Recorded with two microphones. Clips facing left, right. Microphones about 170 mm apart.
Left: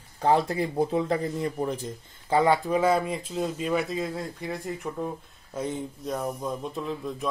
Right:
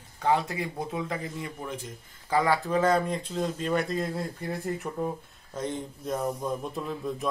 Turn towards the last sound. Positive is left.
turn(degrees=0)  # may be behind; listen again after turning